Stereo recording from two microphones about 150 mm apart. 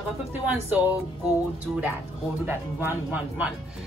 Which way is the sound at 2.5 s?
15° right (ahead or behind).